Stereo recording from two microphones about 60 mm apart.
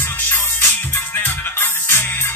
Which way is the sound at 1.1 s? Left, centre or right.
Left.